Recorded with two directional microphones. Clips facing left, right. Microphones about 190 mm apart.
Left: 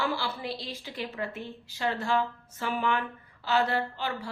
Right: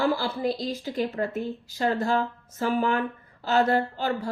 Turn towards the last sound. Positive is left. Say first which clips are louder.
# right 6 dB
turn(degrees=-40)  # may be behind; listen again after turning